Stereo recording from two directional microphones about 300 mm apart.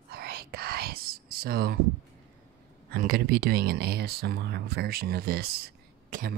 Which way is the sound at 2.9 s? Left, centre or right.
Right.